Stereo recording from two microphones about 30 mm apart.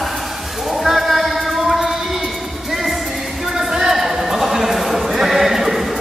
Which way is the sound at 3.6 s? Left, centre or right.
Centre.